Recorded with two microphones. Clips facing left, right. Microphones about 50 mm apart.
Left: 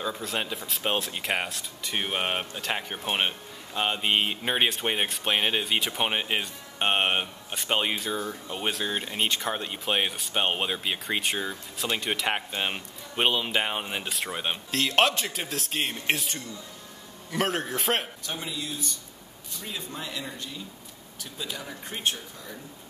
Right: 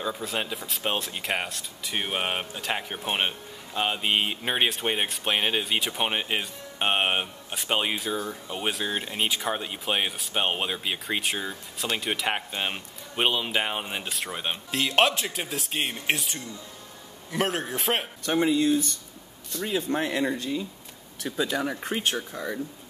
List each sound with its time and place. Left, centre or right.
0.0 s speech: centre
18.2 s speech: right